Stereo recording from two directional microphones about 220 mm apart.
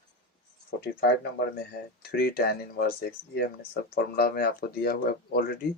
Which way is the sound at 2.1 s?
45° left (ahead or behind).